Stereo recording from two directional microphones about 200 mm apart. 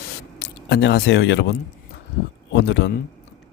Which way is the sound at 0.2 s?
55° left (ahead or behind).